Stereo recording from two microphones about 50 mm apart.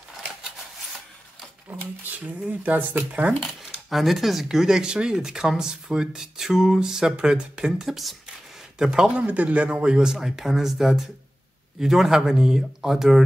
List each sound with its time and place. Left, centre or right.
0.4 s a sound: centre
1.7 s speech: right
3.1 s speech: right
3.9 s speech: centre
7.9 s speech: centre
8.7 s a man's voice: centre
9.1 s speech: right; by 13.2 s centre